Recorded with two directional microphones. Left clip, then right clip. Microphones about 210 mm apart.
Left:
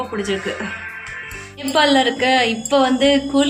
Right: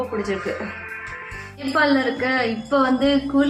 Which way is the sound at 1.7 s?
Centre (ahead or behind).